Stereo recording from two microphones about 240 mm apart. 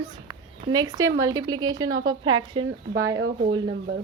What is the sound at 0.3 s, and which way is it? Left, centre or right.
A woman's voice, centre.